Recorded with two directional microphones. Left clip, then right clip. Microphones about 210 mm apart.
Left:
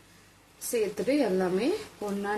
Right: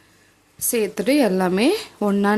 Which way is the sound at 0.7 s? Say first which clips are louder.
Right 7 dB; 40° right (ahead or behind).